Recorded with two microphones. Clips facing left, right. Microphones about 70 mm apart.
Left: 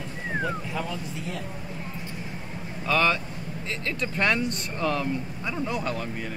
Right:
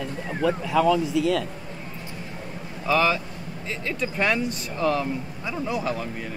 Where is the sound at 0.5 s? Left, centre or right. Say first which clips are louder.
Right 10 dB; right.